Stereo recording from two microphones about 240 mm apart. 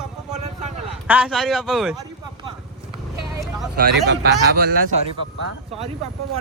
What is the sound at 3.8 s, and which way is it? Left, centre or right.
Speech, right.